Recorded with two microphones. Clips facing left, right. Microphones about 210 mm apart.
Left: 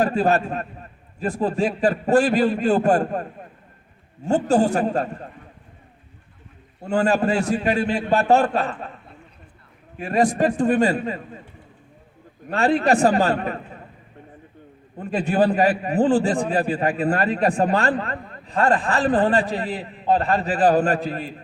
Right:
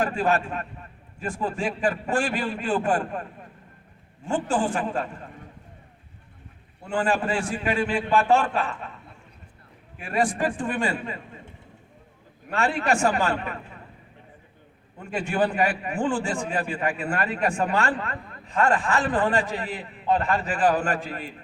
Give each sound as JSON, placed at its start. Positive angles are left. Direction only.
{"t": 0.0, "sound": "a man's voice", "side_deg": 40}
{"t": 4.3, "sound": "a man's voice", "side_deg": 40}
{"t": 6.8, "sound": "a man's voice", "side_deg": 40}
{"t": 10.0, "sound": "a man's voice", "side_deg": 40}
{"t": 12.5, "sound": "a man's voice", "side_deg": 35}
{"t": 14.9, "sound": "a man's voice", "side_deg": 35}